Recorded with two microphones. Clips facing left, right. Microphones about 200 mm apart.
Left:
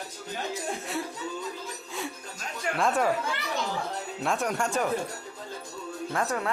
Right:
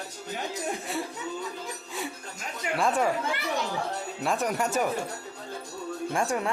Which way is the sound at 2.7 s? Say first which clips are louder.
Right 1 dB; centre (ahead or behind).